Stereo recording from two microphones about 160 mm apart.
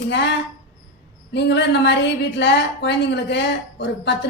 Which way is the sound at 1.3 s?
90° left.